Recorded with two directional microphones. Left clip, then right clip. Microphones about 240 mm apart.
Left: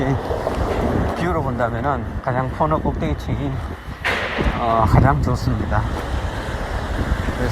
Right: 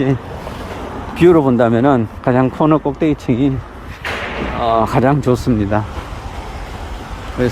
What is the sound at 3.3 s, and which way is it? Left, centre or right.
Speech, right.